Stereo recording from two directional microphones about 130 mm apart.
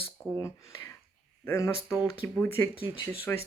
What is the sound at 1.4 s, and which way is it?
Speech, 20° left (ahead or behind).